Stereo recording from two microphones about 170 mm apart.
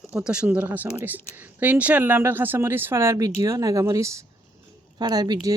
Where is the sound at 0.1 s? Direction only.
5° right (ahead or behind).